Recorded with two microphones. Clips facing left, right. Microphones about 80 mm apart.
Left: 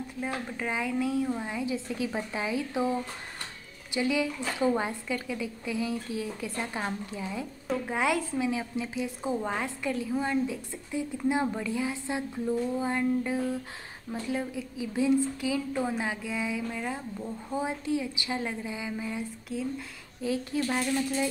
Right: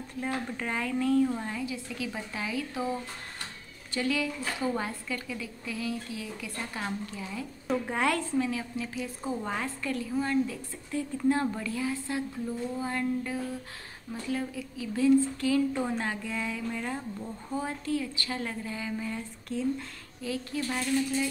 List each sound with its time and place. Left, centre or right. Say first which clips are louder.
0.2 s a woman's voice: right 1 dB; centre
1.7 s a woman's voice: left 4 dB; left
3.9 s a woman's voice: left 2 dB; centre
7.6 s a woman's voice: right 1 dB; centre
8.5 s a woman's voice: left 2 dB; left; by 17.6 s centre
17.6 s a woman's voice: left 1 dB; centre
20.2 s a woman's voice: left 4 dB; left